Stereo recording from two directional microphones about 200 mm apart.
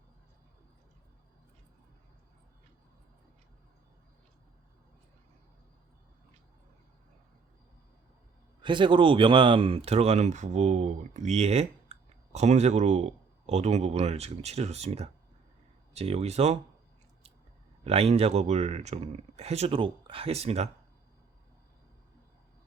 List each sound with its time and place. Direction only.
8.6 s speech: 25° right (ahead or behind)
17.8 s speech: 30° right (ahead or behind)